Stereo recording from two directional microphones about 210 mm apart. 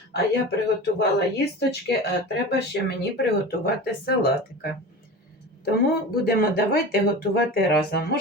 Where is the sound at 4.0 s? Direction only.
45° left (ahead or behind).